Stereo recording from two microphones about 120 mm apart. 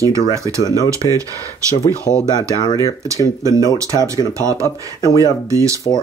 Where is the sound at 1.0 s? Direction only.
35° left (ahead or behind).